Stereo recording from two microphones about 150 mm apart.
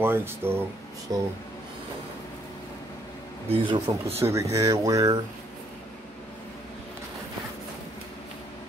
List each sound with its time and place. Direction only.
0.0 s speech: 15° right (ahead or behind)
3.4 s a man's voice: 35° right (ahead or behind)
4.2 s speech: 20° right (ahead or behind)